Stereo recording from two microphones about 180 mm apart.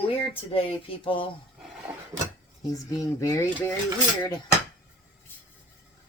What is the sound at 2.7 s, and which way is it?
Speech, 20° left (ahead or behind).